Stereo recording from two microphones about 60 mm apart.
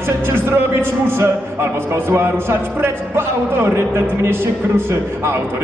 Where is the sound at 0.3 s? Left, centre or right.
Right.